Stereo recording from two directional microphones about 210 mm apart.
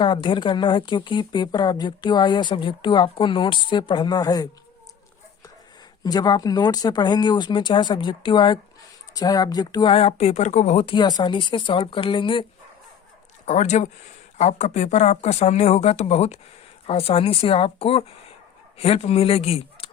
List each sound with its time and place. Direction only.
0.0 s a woman's voice: 25° left (ahead or behind)
6.0 s a woman's voice: 20° left (ahead or behind)